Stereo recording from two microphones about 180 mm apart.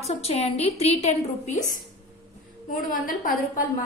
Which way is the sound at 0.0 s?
35° left (ahead or behind).